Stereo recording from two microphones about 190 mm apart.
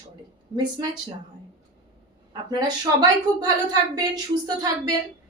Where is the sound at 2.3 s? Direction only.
20° right (ahead or behind).